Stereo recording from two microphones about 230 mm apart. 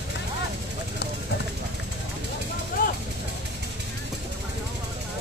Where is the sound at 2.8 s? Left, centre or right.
Left.